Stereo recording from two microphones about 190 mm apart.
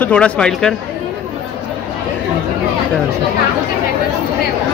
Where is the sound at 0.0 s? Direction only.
5° left (ahead or behind).